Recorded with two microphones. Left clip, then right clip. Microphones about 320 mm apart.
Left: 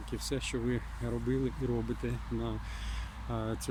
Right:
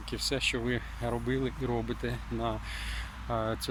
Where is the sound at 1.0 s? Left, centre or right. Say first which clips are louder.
Right 3 dB; right.